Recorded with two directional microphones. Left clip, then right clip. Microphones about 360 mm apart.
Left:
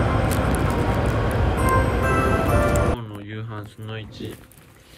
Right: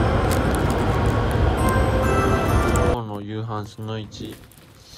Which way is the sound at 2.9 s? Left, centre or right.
Centre.